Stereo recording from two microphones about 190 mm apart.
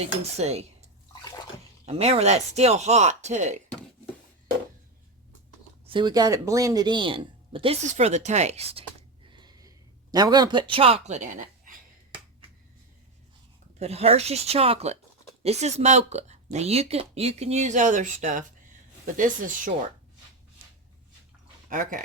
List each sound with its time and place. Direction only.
0.0 s speech: 35° right (ahead or behind)
1.9 s speech: 35° right (ahead or behind)
5.8 s speech: 25° right (ahead or behind); by 11.7 s 40° right (ahead or behind)
13.7 s speech: 35° right (ahead or behind)
21.7 s speech: 45° right (ahead or behind)